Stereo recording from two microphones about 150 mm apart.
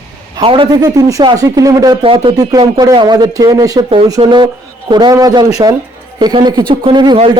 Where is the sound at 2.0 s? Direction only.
35° right (ahead or behind).